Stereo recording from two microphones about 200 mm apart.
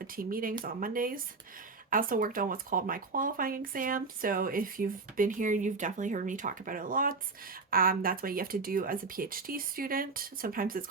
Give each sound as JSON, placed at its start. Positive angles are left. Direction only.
{"t": 0.2, "sound": "speech", "side_deg": -45}